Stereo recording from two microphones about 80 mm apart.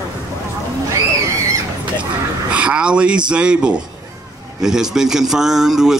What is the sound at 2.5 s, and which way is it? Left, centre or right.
Speech, centre.